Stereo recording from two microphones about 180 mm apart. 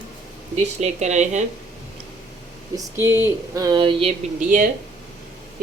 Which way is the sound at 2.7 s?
15° right (ahead or behind).